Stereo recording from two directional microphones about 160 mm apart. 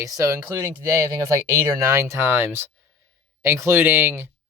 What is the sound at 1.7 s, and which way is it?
Speech, 20° right (ahead or behind).